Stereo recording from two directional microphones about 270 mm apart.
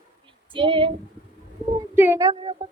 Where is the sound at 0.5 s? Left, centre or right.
Centre.